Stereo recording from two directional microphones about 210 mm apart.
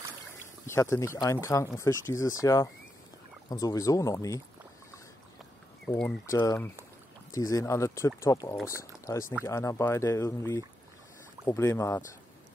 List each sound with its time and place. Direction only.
0.7 s speech: 15° left (ahead or behind)
5.9 s speech: 5° left (ahead or behind)